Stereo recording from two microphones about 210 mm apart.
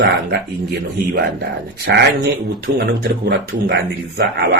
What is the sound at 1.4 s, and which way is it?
A man's voice, 55° right (ahead or behind).